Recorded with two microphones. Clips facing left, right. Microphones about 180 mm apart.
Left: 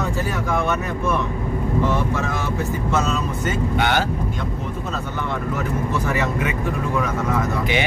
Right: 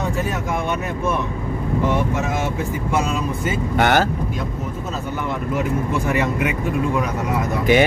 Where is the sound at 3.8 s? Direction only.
50° right (ahead or behind).